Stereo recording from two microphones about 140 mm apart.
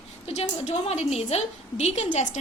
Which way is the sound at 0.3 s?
50° left (ahead or behind).